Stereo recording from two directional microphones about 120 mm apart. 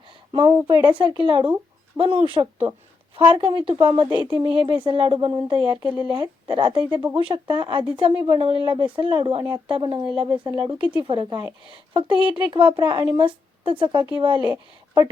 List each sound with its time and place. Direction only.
0.3 s speech: 40° right (ahead or behind)